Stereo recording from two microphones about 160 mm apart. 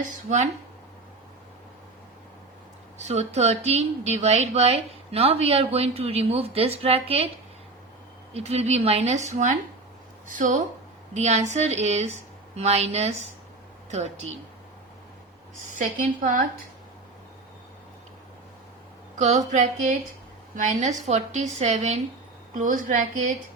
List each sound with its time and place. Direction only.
3.0 s a woman's voice: 45° right (ahead or behind)
8.3 s a woman's voice: 40° right (ahead or behind)
15.7 s speech: 55° right (ahead or behind)
19.2 s a woman's voice: 50° right (ahead or behind)